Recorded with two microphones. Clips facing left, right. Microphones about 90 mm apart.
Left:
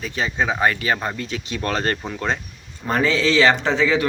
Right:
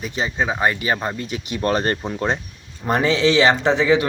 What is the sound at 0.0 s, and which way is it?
Speech, 15° right (ahead or behind).